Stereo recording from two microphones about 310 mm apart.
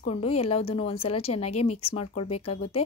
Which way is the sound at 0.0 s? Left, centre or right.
Centre.